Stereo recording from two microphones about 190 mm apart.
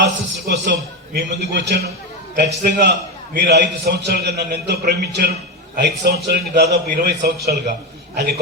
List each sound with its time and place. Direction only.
0.0 s a man's voice: 60° right (ahead or behind)